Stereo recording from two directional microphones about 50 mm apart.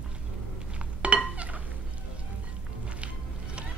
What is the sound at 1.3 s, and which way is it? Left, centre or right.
Fowl, right.